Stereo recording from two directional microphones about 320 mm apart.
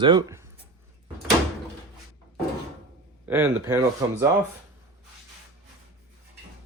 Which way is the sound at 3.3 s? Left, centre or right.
Centre.